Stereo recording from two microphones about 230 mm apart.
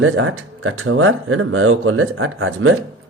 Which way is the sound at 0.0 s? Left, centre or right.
Right.